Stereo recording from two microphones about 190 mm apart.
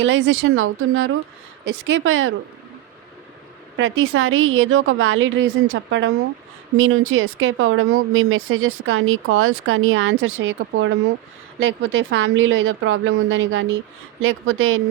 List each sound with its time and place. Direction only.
0.0 s speech: 90° right
3.8 s speech: 90° right
6.7 s speech: 90° right